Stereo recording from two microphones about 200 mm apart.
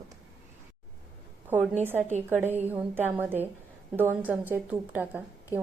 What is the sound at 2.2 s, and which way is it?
A woman's voice, 10° right (ahead or behind).